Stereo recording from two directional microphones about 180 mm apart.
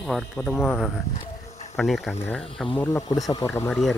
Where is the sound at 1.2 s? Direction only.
40° left (ahead or behind).